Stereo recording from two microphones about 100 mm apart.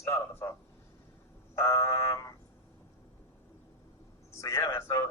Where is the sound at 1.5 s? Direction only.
25° left (ahead or behind).